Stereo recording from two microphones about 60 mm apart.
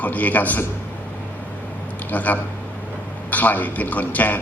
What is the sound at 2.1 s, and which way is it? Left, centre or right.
A man's voice, left.